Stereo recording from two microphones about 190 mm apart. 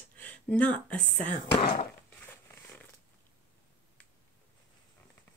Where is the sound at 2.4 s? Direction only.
10° left (ahead or behind).